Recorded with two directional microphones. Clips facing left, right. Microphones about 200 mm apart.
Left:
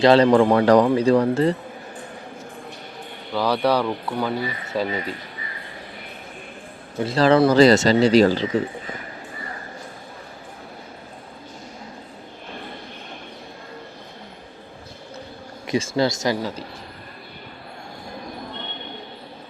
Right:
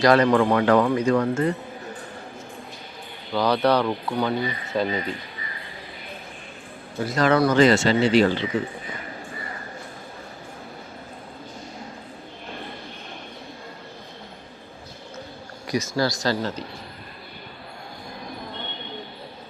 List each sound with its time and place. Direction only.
0.0 s speech: 30° left (ahead or behind)
3.3 s speech: 5° left (ahead or behind)
7.0 s speech: 30° left (ahead or behind)
15.6 s speech: 25° left (ahead or behind)